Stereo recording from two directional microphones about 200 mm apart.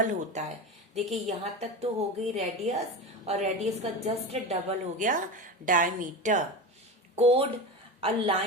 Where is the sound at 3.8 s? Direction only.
30° right (ahead or behind).